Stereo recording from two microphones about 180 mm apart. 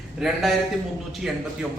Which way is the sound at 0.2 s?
Centre (ahead or behind).